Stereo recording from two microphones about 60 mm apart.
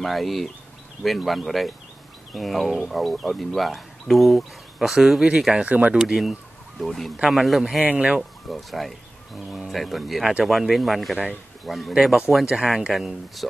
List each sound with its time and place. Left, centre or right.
0.0 s speech: centre
5.7 s speech: right
5.9 s speech: centre
7.8 s speech: right
8.2 s speech: centre
13.4 s speech: centre